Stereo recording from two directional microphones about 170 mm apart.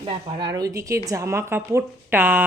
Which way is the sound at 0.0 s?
30° right (ahead or behind).